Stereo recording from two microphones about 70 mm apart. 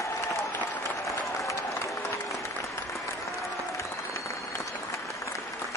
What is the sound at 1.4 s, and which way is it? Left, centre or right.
Applause, left.